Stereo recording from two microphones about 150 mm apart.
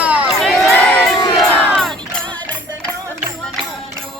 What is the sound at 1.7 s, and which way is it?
Music, centre (ahead or behind).